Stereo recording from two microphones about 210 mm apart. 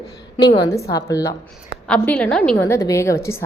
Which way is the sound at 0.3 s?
15° left (ahead or behind).